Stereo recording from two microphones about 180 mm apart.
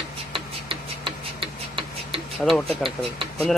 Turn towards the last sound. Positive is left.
turn(degrees=-30)  # may be behind; listen again after turning